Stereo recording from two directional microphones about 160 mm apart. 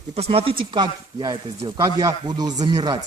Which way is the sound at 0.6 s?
25° right (ahead or behind).